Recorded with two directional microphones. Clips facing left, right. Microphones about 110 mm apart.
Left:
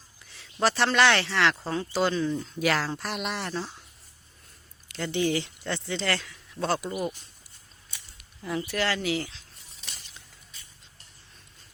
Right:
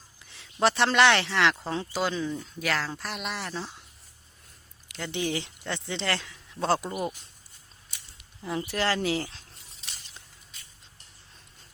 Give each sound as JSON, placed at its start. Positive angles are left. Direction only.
{"t": 0.3, "sound": "a sound", "side_deg": -20}
{"t": 0.9, "sound": "speech", "side_deg": -20}
{"t": 2.0, "sound": "speech", "side_deg": -10}
{"t": 2.3, "sound": "speech", "side_deg": 5}
{"t": 5.1, "sound": "speech", "side_deg": -15}
{"t": 8.4, "sound": "speech", "side_deg": -25}